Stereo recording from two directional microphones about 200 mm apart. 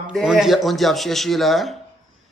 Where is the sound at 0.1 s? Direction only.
5° right (ahead or behind).